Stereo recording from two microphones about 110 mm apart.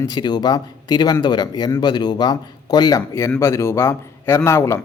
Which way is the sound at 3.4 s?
25° left (ahead or behind).